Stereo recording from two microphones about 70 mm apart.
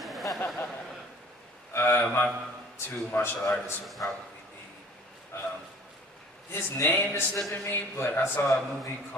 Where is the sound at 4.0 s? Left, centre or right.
Left.